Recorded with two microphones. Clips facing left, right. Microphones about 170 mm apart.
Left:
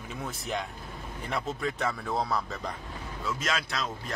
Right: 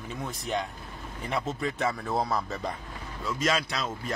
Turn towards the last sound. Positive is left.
turn(degrees=0)  # may be behind; listen again after turning